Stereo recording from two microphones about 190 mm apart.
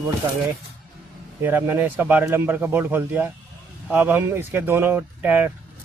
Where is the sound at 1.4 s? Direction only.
10° right (ahead or behind).